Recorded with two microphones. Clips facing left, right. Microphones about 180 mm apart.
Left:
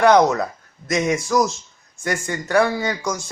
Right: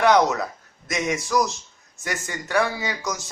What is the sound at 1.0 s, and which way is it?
Speech, 45° left (ahead or behind).